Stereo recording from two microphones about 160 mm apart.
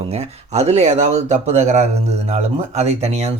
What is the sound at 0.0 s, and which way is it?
Speech, 40° right (ahead or behind).